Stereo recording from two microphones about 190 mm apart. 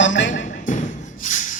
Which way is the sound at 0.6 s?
40° left (ahead or behind).